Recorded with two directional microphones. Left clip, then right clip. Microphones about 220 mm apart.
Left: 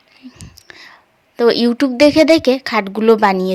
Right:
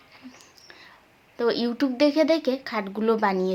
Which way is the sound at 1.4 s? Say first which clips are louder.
Left 11 dB; 40° left (ahead or behind).